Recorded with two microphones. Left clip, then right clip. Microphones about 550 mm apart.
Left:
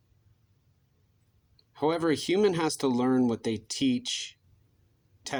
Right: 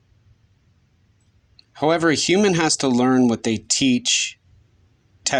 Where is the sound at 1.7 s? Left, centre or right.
Centre.